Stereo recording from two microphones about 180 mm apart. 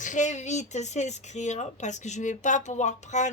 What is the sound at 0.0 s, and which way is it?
A woman's voice, 45° left (ahead or behind).